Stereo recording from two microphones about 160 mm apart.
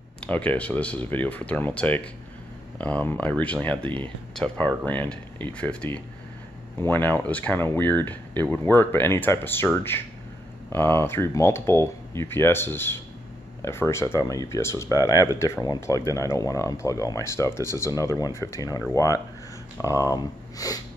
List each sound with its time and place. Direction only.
0.2 s speech: 10° left (ahead or behind)